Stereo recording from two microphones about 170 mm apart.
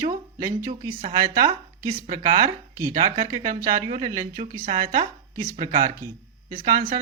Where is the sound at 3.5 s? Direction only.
50° right (ahead or behind).